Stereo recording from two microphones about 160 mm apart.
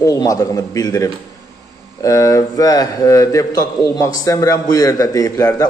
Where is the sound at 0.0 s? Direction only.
20° left (ahead or behind).